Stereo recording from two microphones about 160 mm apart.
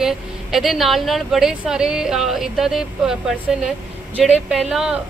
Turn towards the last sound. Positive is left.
turn(degrees=-5)  # may be behind; listen again after turning